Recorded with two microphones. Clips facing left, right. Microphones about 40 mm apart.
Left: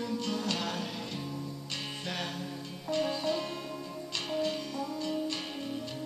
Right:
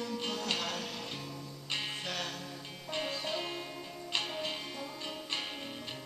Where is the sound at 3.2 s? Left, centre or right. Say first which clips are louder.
Left 4 dB; centre.